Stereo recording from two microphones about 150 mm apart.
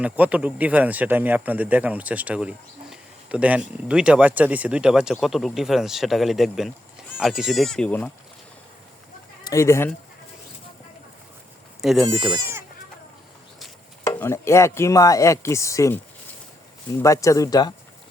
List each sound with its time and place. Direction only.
0.0 s speech: 10° right (ahead or behind); by 8.1 s 5° left (ahead or behind)
9.4 s speech: 20° left (ahead or behind)
11.8 s speech: centre (ahead or behind)
14.0 s chopping: 20° left (ahead or behind)